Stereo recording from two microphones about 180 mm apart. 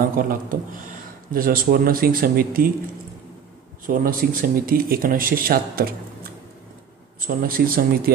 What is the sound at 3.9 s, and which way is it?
Speech, 50° right (ahead or behind).